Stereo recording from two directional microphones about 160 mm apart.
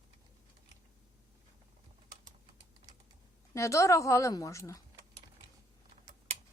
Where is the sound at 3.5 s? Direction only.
20° left (ahead or behind).